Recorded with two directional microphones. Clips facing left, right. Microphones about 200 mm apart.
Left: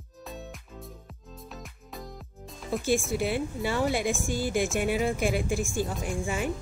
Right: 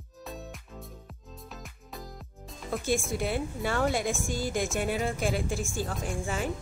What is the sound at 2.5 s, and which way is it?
Speech, centre (ahead or behind).